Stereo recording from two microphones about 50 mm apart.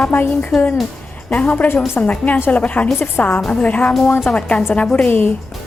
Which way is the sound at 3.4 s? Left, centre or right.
Centre.